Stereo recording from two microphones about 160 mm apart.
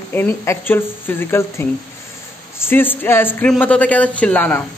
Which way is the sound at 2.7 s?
10° left (ahead or behind).